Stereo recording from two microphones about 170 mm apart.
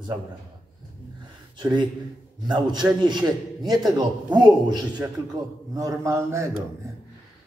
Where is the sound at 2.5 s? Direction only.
25° right (ahead or behind).